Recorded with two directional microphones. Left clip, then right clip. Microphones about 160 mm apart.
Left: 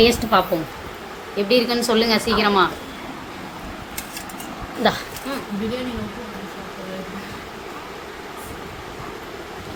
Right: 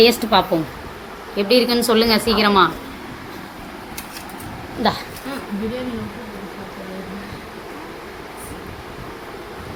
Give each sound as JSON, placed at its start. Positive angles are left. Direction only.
{"t": 0.0, "sound": "a woman's voice", "side_deg": -20}
{"t": 4.8, "sound": "a woman's voice", "side_deg": -10}